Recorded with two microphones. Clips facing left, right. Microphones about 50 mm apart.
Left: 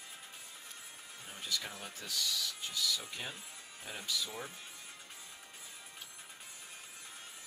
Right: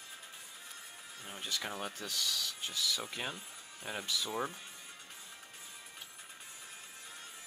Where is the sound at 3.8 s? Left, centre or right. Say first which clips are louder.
Right 2 dB; right.